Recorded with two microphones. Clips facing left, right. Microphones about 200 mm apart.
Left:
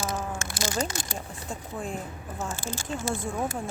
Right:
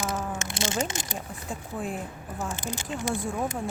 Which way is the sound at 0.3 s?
25° right (ahead or behind).